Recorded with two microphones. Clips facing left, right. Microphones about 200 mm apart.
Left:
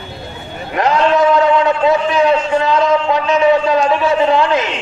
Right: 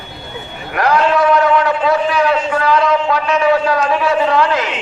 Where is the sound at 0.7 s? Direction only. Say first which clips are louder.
Left 1 dB; 20° left (ahead or behind).